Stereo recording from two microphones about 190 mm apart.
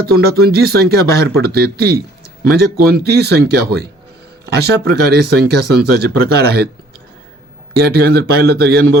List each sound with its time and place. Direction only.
0.1 s speech: 55° right (ahead or behind)
7.8 s speech: 55° right (ahead or behind)